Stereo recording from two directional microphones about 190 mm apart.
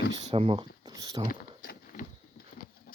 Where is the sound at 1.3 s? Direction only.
50° left (ahead or behind).